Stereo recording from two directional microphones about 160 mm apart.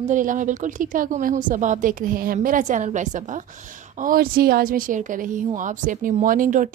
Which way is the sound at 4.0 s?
65° right (ahead or behind).